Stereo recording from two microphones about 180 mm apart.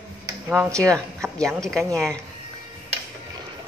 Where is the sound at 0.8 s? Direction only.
5° left (ahead or behind).